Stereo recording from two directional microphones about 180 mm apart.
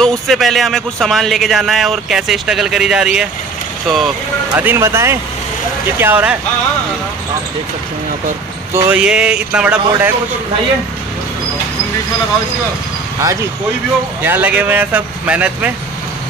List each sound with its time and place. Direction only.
0.0 s a man's voice: centre (ahead or behind)
4.6 s speech: 15° right (ahead or behind)
8.7 s speech: 10° right (ahead or behind)
13.2 s speech: 20° right (ahead or behind)